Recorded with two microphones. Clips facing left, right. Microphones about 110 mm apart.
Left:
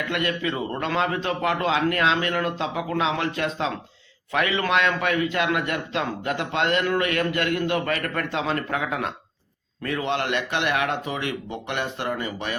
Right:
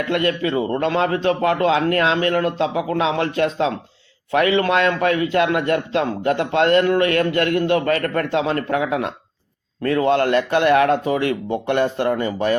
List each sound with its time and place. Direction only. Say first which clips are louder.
0.1 s a man's voice: right 7 dB; 30° right (ahead or behind)